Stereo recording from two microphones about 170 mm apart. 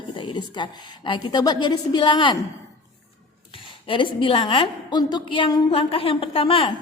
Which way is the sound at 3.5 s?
30° left (ahead or behind).